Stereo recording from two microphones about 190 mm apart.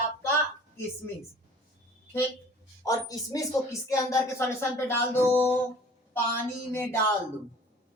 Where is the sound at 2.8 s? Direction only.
20° left (ahead or behind).